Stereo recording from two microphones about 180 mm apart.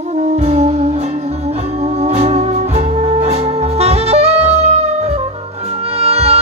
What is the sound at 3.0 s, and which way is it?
Saxophone, 35° right (ahead or behind).